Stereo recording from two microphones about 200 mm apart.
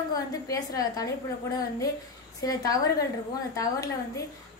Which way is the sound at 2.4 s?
20° left (ahead or behind).